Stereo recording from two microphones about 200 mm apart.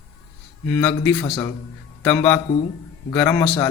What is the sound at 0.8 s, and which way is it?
Speech, 5° left (ahead or behind).